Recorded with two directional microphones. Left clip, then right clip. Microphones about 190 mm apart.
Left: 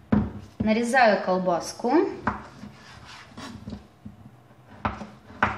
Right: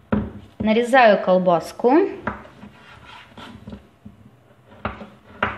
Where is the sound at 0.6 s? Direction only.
40° right (ahead or behind).